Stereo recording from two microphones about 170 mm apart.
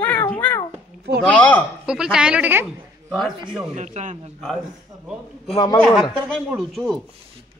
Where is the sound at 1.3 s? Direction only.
5° left (ahead or behind).